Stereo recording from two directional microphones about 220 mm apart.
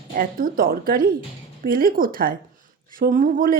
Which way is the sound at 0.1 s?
40° right (ahead or behind).